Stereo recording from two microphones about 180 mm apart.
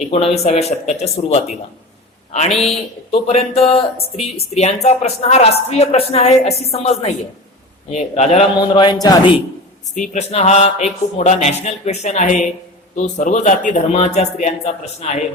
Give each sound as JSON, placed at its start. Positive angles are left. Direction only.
{"t": 0.1, "sound": "speech", "side_deg": 35}
{"t": 9.9, "sound": "speech", "side_deg": 45}